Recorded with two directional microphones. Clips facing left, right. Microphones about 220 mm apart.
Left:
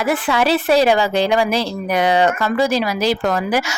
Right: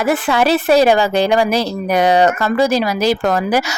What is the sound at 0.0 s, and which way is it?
Speech, 45° right (ahead or behind).